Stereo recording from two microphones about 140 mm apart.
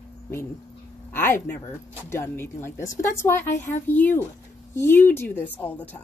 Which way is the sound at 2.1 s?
20° left (ahead or behind).